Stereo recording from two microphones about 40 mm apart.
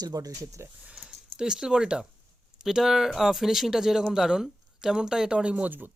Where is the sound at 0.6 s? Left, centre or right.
Right.